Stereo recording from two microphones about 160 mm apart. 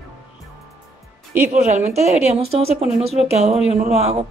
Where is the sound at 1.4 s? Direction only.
45° right (ahead or behind).